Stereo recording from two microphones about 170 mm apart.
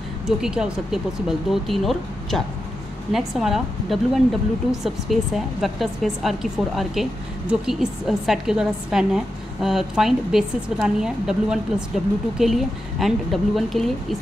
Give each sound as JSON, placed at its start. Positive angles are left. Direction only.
{"t": 0.4, "sound": "a woman's voice", "side_deg": -5}